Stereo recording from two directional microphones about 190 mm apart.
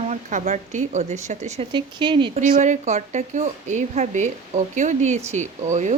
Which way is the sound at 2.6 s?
35° right (ahead or behind).